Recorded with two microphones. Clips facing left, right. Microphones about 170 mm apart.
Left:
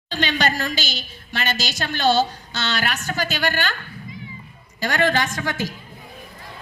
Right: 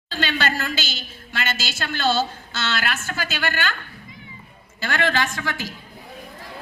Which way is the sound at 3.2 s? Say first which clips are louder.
Left 2 dB; 40° left (ahead or behind).